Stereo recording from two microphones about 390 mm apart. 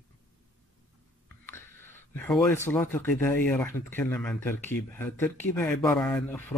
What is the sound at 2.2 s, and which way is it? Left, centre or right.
Speech, centre.